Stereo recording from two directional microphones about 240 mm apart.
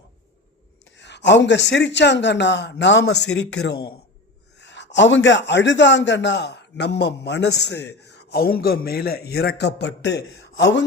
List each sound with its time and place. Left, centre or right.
0.9 s a man's voice: left